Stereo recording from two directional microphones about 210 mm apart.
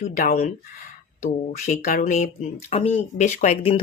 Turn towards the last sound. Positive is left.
turn(degrees=30)  # may be behind; listen again after turning